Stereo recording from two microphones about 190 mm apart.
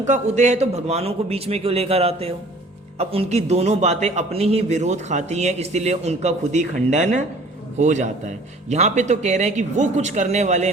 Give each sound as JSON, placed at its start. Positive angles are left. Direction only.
{"t": 0.0, "sound": "a man's voice", "side_deg": -40}